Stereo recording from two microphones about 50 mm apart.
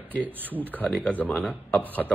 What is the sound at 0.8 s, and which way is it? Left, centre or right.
Speech, centre.